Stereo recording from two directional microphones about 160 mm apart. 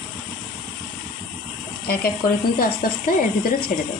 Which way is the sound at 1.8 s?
70° left (ahead or behind).